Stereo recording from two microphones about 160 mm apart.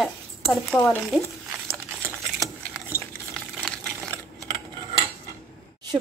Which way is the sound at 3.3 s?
5° left (ahead or behind).